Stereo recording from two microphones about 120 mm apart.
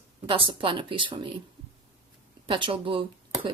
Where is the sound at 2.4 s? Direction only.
45° right (ahead or behind).